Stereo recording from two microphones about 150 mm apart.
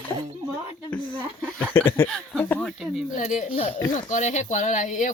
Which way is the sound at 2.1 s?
10° left (ahead or behind).